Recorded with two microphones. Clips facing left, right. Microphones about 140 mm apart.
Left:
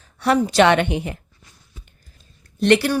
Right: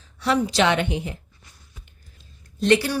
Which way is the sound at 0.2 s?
55° left (ahead or behind).